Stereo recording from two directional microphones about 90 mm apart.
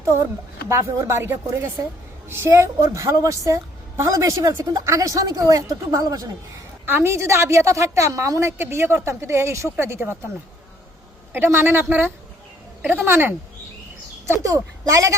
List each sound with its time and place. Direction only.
0.0 s a woman's voice: 35° right (ahead or behind)
6.8 s a woman's voice: 25° right (ahead or behind)
11.3 s a woman's voice: 25° right (ahead or behind)
14.4 s a woman's voice: 40° right (ahead or behind)